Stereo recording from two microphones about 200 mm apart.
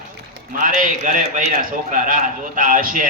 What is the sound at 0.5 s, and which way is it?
A man's voice, 45° right (ahead or behind).